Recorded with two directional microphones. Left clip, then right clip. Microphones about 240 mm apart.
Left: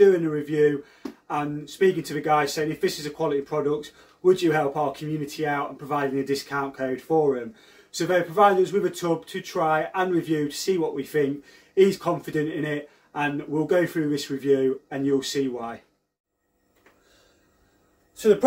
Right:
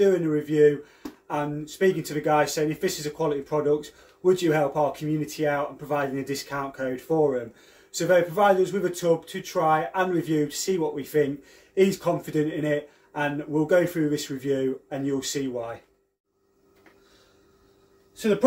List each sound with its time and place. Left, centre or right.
0.0 s speech: centre
7.9 s speech: centre